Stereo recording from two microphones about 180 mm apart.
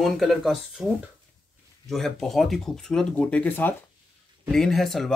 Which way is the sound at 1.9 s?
Centre (ahead or behind).